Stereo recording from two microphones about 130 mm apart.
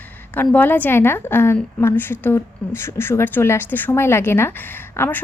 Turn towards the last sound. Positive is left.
turn(degrees=15)  # may be behind; listen again after turning